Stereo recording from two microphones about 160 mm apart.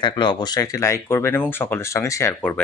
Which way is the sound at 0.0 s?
30° left (ahead or behind).